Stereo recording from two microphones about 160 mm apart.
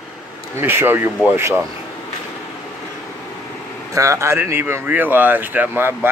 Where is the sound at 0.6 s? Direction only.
15° right (ahead or behind).